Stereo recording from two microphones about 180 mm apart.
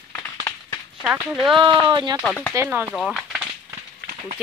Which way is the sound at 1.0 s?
5° right (ahead or behind).